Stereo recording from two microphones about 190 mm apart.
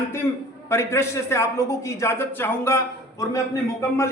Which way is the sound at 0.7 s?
15° left (ahead or behind).